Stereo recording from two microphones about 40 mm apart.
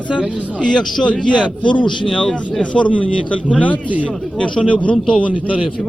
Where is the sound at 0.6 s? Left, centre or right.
Left.